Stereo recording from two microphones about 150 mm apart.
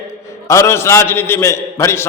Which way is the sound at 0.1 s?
20° left (ahead or behind).